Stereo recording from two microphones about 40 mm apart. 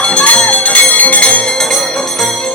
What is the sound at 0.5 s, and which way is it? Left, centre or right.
Bell, left.